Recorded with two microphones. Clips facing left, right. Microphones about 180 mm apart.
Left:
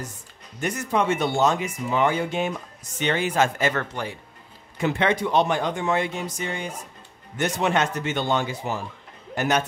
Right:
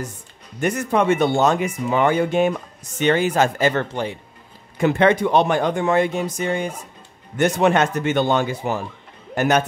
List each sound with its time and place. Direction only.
0.6 s speech: 55° right (ahead or behind); by 4.2 s 25° right (ahead or behind)
4.7 s speech: 50° right (ahead or behind)